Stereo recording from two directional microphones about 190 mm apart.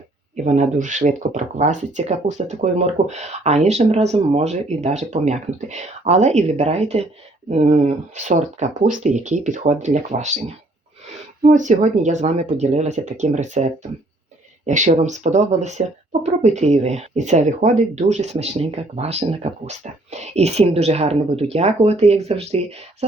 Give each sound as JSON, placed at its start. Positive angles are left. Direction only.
{"t": 0.4, "sound": "speech", "side_deg": -40}
{"t": 14.7, "sound": "speech", "side_deg": -40}